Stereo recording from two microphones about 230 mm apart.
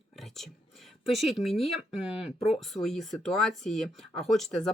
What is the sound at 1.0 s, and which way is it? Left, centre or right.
Speech, centre.